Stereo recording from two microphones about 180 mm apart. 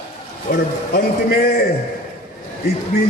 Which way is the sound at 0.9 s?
55° left (ahead or behind).